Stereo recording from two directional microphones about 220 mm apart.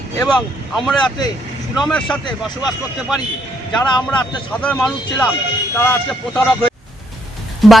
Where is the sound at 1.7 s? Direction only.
Centre (ahead or behind).